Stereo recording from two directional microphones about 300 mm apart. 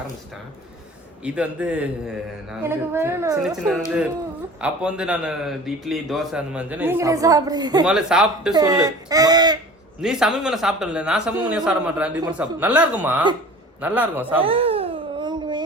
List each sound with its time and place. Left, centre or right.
1.2 s a man's voice: centre
7.9 s a man's voice: centre
10.0 s a man's voice: centre
14.4 s wail: centre